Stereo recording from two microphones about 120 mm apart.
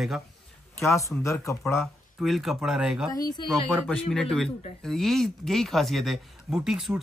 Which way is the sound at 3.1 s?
30° left (ahead or behind).